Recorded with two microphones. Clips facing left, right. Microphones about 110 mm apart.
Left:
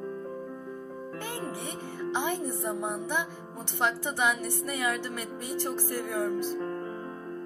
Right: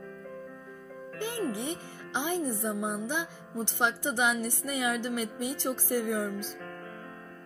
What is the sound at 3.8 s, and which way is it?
Music, 15° right (ahead or behind).